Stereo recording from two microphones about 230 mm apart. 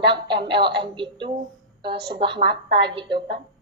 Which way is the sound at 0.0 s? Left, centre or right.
Right.